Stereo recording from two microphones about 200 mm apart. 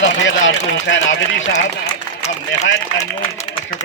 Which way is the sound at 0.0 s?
65° left (ahead or behind).